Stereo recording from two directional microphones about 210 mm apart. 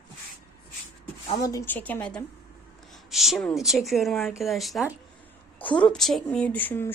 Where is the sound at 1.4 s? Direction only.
10° left (ahead or behind).